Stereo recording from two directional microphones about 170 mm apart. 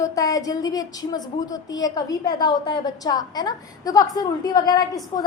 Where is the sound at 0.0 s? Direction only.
20° left (ahead or behind).